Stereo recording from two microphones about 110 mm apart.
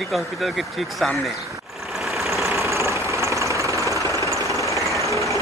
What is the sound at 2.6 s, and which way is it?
Vehicle, 25° right (ahead or behind).